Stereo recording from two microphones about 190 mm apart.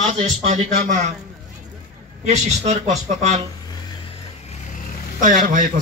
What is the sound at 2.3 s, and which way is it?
Speech, 35° right (ahead or behind).